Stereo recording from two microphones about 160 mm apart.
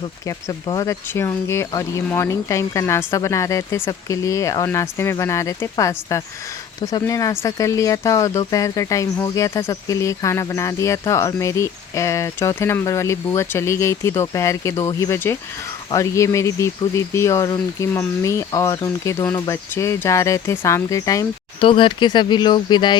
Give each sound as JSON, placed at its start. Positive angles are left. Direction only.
{"t": 0.3, "sound": "speech", "side_deg": 20}
{"t": 21.6, "sound": "speech", "side_deg": 30}